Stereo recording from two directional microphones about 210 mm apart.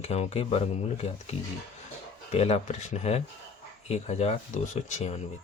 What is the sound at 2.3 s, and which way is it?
Speech, 30° left (ahead or behind).